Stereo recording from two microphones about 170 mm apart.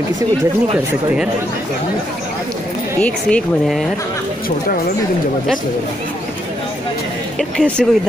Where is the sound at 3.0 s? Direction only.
5° left (ahead or behind).